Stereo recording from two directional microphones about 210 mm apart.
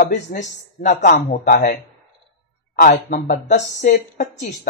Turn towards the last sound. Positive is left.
turn(degrees=35)  # may be behind; listen again after turning